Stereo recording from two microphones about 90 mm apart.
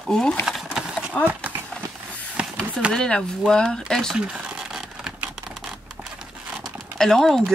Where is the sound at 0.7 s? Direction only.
5° right (ahead or behind).